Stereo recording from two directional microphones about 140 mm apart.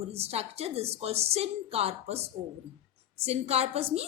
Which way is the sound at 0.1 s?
45° right (ahead or behind).